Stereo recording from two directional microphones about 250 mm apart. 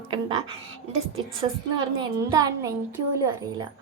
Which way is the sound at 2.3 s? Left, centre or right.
Centre.